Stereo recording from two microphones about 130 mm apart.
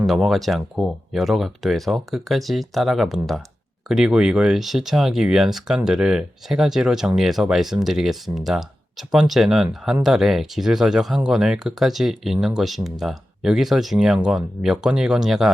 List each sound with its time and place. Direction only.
0.0 s speech: centre (ahead or behind)